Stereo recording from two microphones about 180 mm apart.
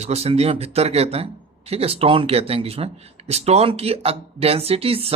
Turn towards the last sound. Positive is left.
turn(degrees=-30)  # may be behind; listen again after turning